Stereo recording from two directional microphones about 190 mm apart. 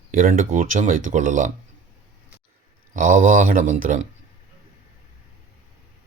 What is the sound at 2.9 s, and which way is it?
Speech, 45° right (ahead or behind).